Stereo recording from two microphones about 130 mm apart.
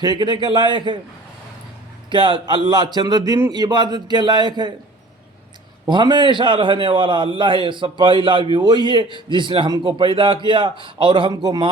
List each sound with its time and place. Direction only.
0.0 s a man's voice: 35° right (ahead or behind)
2.0 s a man's voice: 40° right (ahead or behind)
5.8 s a man's voice: 35° right (ahead or behind)